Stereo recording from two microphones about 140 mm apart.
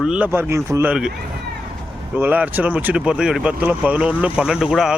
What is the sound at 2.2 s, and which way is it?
Speech, 10° right (ahead or behind).